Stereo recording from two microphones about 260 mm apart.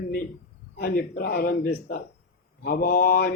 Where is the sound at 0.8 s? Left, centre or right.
Left.